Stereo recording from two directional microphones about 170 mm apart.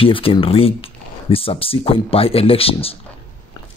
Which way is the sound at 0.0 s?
30° left (ahead or behind).